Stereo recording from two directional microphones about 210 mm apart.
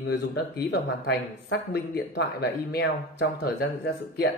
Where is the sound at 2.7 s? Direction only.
50° left (ahead or behind).